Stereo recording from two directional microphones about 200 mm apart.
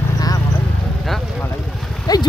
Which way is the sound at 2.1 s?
20° left (ahead or behind).